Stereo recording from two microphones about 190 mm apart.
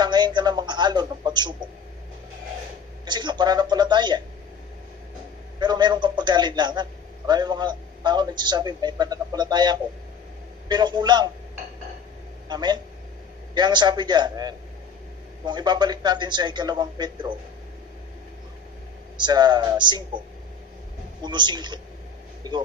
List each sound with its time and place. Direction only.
0.0 s a sound: 25° right (ahead or behind)
3.1 s speech: 25° right (ahead or behind)
5.6 s a man's voice: 25° right (ahead or behind)
12.4 s a man's voice: 20° right (ahead or behind)
19.1 s a man's voice: 25° right (ahead or behind)
21.2 s a man's voice: 25° right (ahead or behind)